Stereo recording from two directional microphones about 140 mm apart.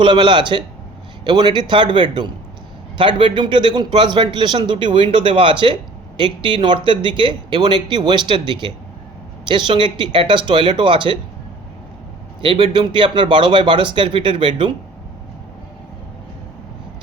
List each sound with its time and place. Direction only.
0.0 s a man's voice: 35° right (ahead or behind)
12.4 s a man's voice: 35° right (ahead or behind)